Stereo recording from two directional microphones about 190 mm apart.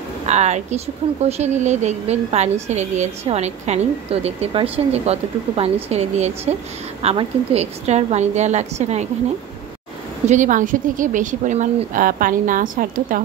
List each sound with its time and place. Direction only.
0.3 s speech: 35° right (ahead or behind)
10.2 s a woman's voice: 40° right (ahead or behind)